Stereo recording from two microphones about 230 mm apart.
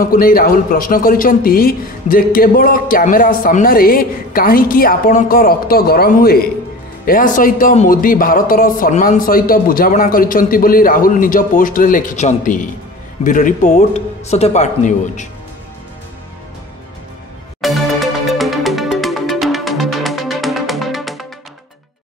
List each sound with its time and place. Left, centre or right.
0.0 s speech: left
17.6 s music: centre